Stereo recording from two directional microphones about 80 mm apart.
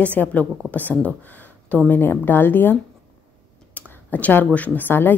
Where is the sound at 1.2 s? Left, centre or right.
Left.